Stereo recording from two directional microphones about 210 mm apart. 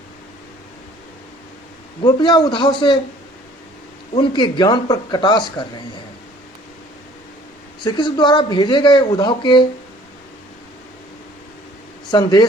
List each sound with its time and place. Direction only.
2.0 s speech: 20° left (ahead or behind)
4.1 s speech: 20° left (ahead or behind)
7.9 s speech: 20° left (ahead or behind)
12.1 s speech: 20° left (ahead or behind)